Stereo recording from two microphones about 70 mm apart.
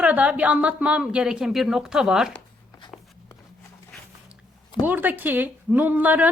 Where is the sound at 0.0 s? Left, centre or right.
Right.